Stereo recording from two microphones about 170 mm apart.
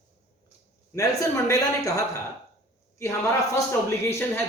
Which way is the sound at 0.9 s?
20° left (ahead or behind).